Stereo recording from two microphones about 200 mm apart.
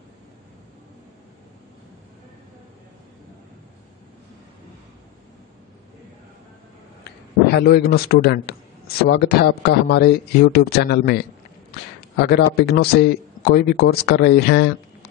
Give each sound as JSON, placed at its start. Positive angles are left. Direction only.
{"t": 7.1, "sound": "a man's voice", "side_deg": 55}
{"t": 12.3, "sound": "speech", "side_deg": 55}